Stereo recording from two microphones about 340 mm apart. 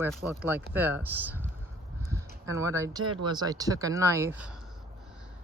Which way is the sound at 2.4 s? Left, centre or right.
Centre.